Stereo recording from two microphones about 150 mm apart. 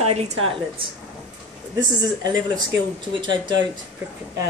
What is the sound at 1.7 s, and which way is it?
Speech, 25° right (ahead or behind).